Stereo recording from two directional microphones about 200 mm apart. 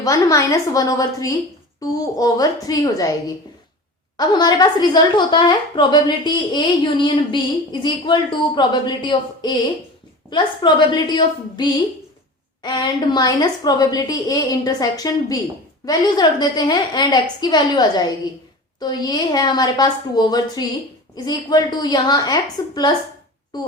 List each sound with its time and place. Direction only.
0.0 s a woman's voice: 15° left (ahead or behind)